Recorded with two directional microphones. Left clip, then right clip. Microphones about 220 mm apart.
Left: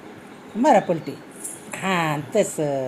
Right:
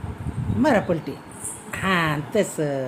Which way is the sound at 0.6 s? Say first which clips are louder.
Left 3 dB; 10° right (ahead or behind).